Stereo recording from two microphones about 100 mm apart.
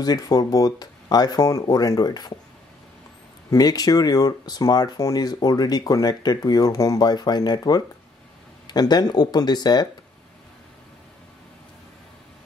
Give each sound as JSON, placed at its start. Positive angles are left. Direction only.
{"t": 0.0, "sound": "speech", "side_deg": 40}
{"t": 3.4, "sound": "speech", "side_deg": 40}